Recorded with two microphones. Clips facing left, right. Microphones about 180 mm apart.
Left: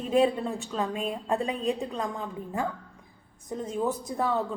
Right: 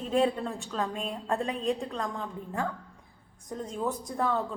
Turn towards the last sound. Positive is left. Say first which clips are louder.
# left 2 dB
turn(degrees=5)  # may be behind; listen again after turning